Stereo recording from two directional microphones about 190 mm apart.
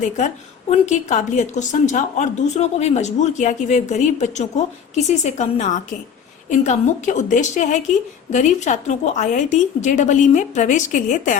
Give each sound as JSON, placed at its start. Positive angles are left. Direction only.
{"t": 0.7, "sound": "a woman's voice", "side_deg": 35}